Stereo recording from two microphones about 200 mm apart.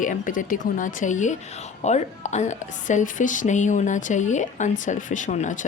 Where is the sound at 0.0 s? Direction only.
40° left (ahead or behind).